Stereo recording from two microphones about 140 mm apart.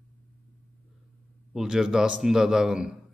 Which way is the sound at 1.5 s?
5° right (ahead or behind).